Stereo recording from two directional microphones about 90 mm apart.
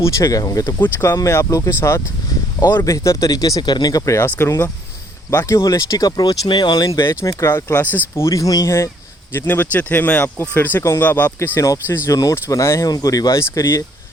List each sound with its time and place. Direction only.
0.0 s speech: 35° left (ahead or behind)
2.7 s speech: 40° left (ahead or behind)
3.6 s speech: 50° left (ahead or behind)
7.0 s speech: 30° left (ahead or behind)
7.7 s speech: 25° left (ahead or behind); by 13.7 s 40° left (ahead or behind)